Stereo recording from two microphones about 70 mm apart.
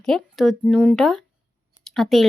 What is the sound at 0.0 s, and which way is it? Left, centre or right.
Speech, centre.